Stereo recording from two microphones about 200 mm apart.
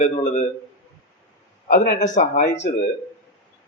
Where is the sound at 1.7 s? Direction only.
40° left (ahead or behind).